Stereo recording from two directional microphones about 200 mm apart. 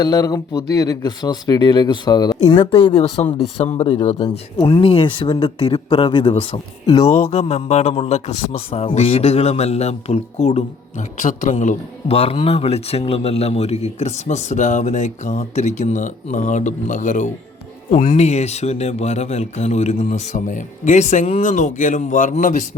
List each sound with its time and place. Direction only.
0.0 s speech: 20° left (ahead or behind)
7.3 s speech: 30° left (ahead or behind)